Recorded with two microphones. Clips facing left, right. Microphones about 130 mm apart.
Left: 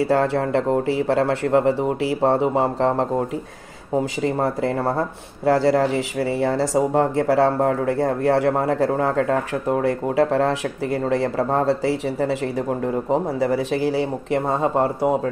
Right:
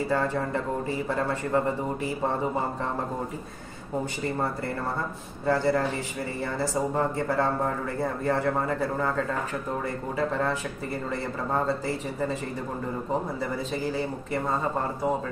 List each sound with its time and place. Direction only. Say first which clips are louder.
0.0 s speech: left 7 dB; 85° left